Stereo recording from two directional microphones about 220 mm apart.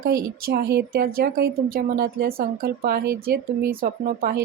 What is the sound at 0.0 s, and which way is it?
A woman's voice, 45° right (ahead or behind).